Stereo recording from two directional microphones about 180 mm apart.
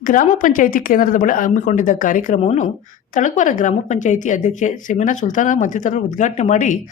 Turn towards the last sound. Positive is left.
turn(degrees=45)  # may be behind; listen again after turning